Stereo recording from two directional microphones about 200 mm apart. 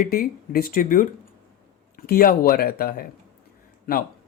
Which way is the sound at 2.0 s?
45° left (ahead or behind).